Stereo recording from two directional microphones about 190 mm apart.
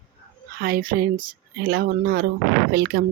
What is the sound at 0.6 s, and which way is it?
Speech, 50° right (ahead or behind).